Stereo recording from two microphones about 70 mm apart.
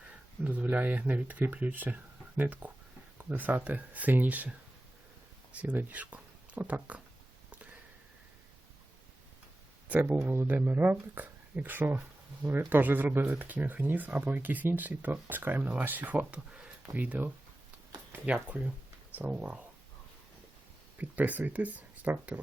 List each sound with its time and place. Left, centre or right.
0.1 s speech: right
9.9 s speech: right
19.3 s speech: centre
21.0 s speech: right